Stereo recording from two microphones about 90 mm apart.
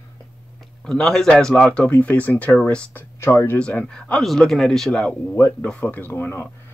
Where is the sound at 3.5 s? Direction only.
10° left (ahead or behind).